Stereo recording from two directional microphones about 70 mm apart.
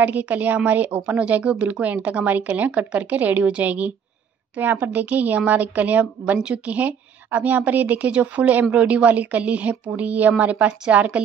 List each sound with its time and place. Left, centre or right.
0.0 s a woman's voice: right